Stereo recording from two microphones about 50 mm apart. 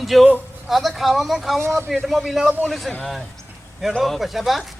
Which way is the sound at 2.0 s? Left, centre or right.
Centre.